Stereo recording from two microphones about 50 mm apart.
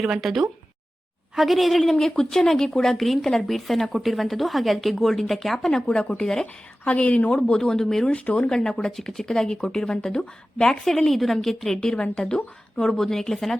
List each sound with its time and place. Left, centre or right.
0.0 s a woman's voice: centre
6.8 s speech: left; by 8.0 s centre
8.0 s speech: left
8.5 s a woman's voice: centre